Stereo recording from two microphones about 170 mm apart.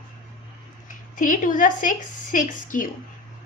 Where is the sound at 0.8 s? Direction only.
50° left (ahead or behind).